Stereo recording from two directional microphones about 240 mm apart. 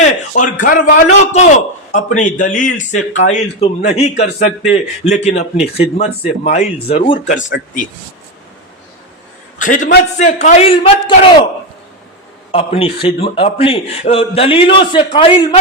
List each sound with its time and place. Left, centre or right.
0.0 s a man's voice: left
9.6 s a man's voice: left
12.5 s a man's voice: left